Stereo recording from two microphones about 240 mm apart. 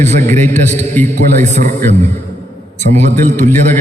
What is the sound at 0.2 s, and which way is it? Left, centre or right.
Speech, centre.